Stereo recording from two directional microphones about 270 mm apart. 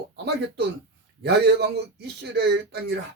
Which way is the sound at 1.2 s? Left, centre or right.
Right.